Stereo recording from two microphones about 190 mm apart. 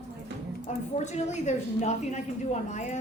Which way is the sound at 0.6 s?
35° left (ahead or behind).